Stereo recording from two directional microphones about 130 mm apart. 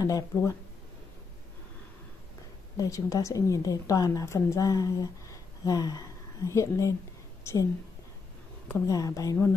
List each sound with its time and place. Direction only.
0.0 s a woman's voice: 25° left (ahead or behind)
2.8 s a woman's voice: 25° left (ahead or behind)
8.6 s a woman's voice: 25° left (ahead or behind)